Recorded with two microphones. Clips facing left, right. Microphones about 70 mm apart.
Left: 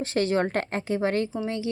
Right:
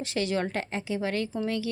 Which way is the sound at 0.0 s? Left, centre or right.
Left.